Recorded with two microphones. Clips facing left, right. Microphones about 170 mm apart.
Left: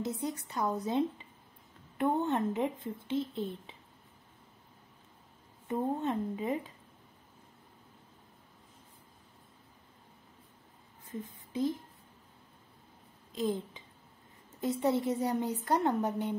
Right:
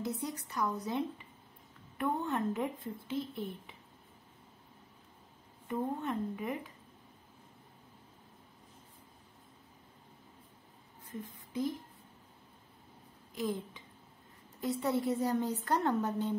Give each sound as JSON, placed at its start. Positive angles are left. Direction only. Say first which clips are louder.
{"t": 0.0, "sound": "speech", "louder": "left 2 dB", "side_deg": 25}
{"t": 5.7, "sound": "speech", "louder": "left 3 dB", "side_deg": 25}
{"t": 11.5, "sound": "speech", "louder": "left 3 dB", "side_deg": 25}
{"t": 13.3, "sound": "a woman's voice", "louder": "left 3 dB", "side_deg": 25}